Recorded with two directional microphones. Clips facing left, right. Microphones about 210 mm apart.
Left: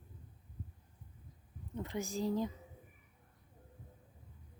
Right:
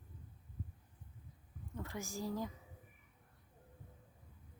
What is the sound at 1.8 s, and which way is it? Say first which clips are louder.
Speech: left 6 dB; 20° left (ahead or behind).